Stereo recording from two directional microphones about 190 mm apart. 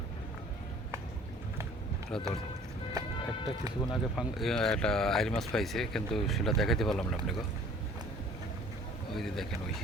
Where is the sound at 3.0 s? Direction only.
20° right (ahead or behind).